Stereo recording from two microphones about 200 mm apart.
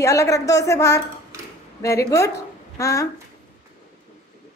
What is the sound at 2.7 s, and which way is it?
Speech, 15° left (ahead or behind).